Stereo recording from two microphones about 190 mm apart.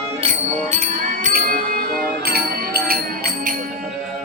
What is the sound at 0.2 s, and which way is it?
Music, 35° right (ahead or behind).